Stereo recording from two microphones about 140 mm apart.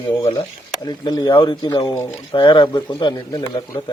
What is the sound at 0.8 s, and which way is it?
A man's voice, 30° left (ahead or behind).